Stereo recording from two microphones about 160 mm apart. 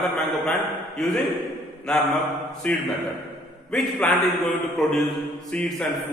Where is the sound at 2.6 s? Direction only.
10° left (ahead or behind).